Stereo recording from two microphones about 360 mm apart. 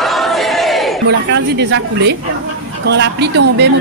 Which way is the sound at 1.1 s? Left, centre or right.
Right.